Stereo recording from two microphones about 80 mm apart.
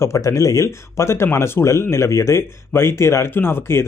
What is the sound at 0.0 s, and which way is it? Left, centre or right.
Speech, left.